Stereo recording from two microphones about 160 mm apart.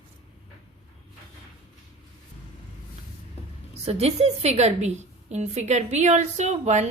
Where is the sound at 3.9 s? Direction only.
40° right (ahead or behind).